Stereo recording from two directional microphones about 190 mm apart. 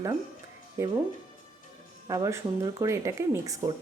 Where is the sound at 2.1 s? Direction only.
15° right (ahead or behind).